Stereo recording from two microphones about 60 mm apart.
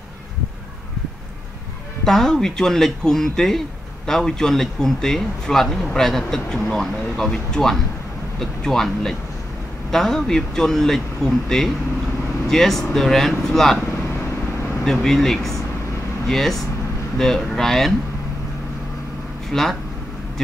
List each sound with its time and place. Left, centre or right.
2.0 s a man's voice: centre
14.9 s a man's voice: centre
19.5 s speech: centre